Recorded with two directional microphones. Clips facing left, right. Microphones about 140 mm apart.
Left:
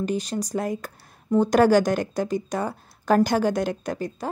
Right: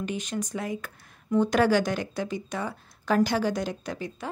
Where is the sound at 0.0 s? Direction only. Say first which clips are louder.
Left 5 dB; 35° left (ahead or behind).